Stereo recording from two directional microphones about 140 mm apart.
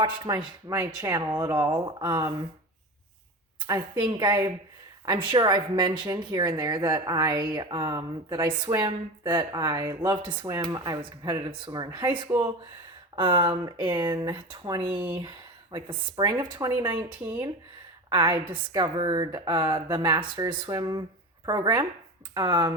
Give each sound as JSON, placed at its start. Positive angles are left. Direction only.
{"t": 0.3, "sound": "speech", "side_deg": -30}
{"t": 3.7, "sound": "speech", "side_deg": -35}
{"t": 14.8, "sound": "speech", "side_deg": -10}
{"t": 15.7, "sound": "speech", "side_deg": -35}